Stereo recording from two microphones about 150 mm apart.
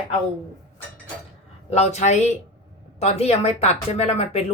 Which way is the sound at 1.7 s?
45° left (ahead or behind).